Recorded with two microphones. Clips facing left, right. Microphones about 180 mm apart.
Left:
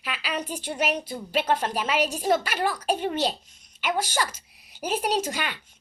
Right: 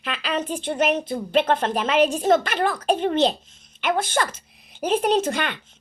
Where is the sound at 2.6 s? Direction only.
55° right (ahead or behind).